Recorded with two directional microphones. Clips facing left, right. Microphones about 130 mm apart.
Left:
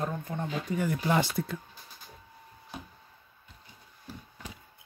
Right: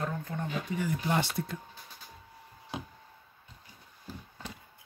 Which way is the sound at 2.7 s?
90° right.